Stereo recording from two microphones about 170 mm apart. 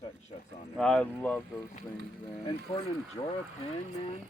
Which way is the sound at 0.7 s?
5° left (ahead or behind).